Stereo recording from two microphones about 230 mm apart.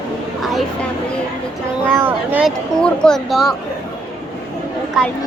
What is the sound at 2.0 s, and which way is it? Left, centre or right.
Speech, centre.